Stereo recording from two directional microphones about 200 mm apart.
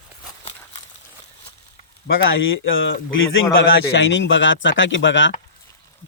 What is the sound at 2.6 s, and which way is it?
Speech, 75° left (ahead or behind).